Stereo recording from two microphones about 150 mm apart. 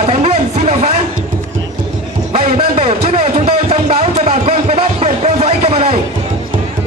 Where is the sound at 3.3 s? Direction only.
45° right (ahead or behind).